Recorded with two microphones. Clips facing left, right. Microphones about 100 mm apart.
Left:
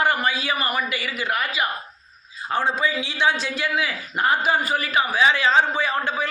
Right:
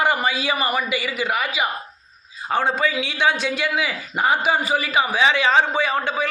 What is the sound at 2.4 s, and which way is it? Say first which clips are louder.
A man's voice: right 2 dB; 60° right (ahead or behind).